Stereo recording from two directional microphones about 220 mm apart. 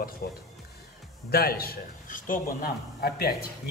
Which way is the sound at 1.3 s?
45° left (ahead or behind).